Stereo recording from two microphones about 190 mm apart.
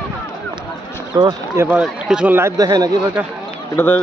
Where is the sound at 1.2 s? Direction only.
25° right (ahead or behind).